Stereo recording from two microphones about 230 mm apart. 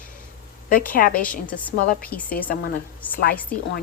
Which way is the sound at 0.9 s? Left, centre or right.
Left.